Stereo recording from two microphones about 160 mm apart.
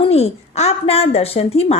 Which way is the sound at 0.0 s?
40° left (ahead or behind).